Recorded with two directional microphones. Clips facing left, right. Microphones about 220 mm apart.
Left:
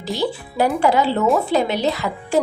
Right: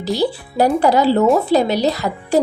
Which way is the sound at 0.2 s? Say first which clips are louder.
Right 2 dB; 40° right (ahead or behind).